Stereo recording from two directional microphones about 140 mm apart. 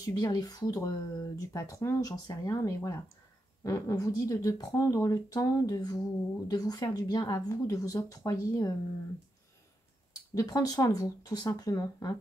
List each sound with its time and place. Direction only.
0.0 s speech: 25° left (ahead or behind)
10.3 s speech: 25° left (ahead or behind)